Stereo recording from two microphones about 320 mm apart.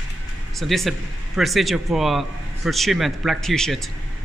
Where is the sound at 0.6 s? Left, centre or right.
Centre.